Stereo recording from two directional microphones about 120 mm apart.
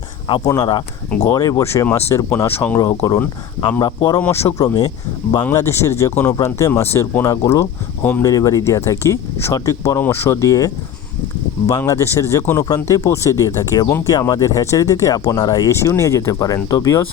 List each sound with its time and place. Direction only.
1.3 s speech: 25° left (ahead or behind)
4.2 s speech: 20° left (ahead or behind)
5.4 s speech: 20° left (ahead or behind)
11.8 s speech: 25° left (ahead or behind)